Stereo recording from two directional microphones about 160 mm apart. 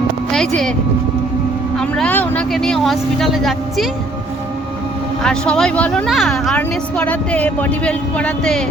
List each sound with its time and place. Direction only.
0.3 s speech: 5° left (ahead or behind)
1.8 s speech: 10° left (ahead or behind)
5.2 s speech: 5° left (ahead or behind)